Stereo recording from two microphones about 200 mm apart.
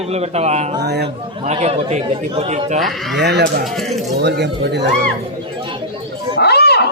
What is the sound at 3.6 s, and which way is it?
Speech, centre (ahead or behind).